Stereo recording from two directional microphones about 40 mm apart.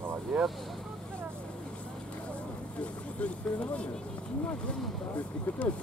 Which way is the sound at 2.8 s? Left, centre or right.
Left.